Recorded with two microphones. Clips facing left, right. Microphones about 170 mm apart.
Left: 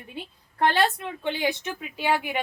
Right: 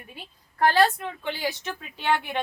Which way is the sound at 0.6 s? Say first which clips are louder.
Right 2 dB; 20° left (ahead or behind).